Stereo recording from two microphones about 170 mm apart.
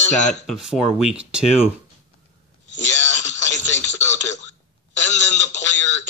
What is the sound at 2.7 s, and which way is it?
Radio, 90° left.